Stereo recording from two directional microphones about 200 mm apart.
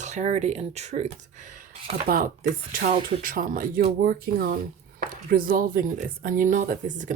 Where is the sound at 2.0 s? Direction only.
45° right (ahead or behind).